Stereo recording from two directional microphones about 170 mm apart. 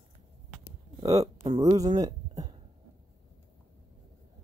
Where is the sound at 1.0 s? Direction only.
20° right (ahead or behind).